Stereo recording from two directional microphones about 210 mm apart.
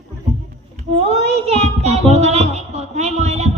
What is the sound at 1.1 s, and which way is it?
Child singing, 30° right (ahead or behind).